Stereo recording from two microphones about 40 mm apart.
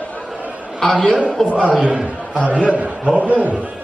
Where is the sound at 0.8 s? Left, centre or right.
Centre.